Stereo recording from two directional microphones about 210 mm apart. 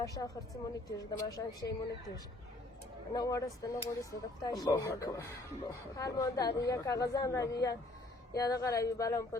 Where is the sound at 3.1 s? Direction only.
15° left (ahead or behind).